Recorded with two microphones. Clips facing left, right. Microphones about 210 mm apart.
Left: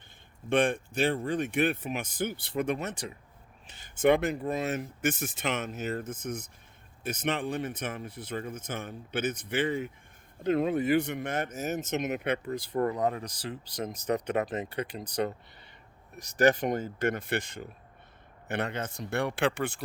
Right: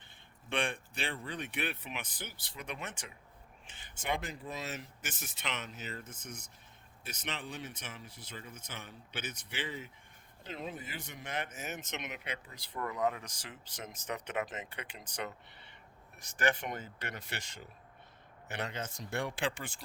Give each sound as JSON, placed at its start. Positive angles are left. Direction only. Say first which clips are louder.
{"t": 0.5, "sound": "speech", "louder": "left 10 dB", "side_deg": 45}